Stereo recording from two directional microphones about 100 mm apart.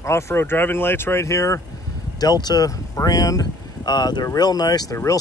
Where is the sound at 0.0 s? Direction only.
25° left (ahead or behind).